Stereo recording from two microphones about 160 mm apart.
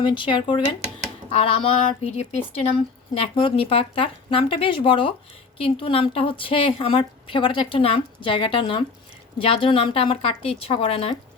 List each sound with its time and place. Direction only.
0.0 s a woman's voice: 30° left (ahead or behind)